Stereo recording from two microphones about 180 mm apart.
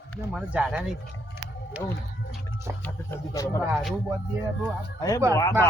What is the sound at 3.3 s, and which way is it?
Speech, 20° left (ahead or behind).